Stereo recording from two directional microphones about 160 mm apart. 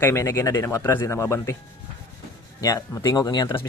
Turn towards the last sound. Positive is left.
turn(degrees=25)  # may be behind; listen again after turning